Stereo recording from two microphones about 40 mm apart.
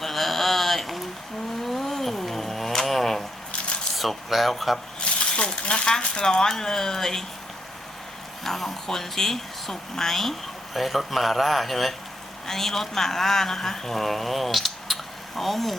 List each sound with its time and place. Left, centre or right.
0.0 s a sound: centre
1.6 s vehicle: centre
3.9 s speech: centre
4.9 s a sound: left
6.0 s speech: left
6.2 s speech: centre
8.4 s speech: centre